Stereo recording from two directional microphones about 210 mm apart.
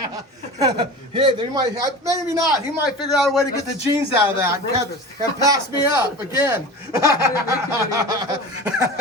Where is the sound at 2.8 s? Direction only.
Centre (ahead or behind).